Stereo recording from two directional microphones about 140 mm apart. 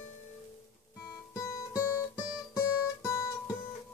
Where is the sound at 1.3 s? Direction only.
25° left (ahead or behind).